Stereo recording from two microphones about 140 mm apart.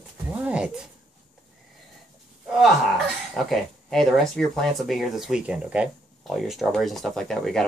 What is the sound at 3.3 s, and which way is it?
Speech, centre (ahead or behind).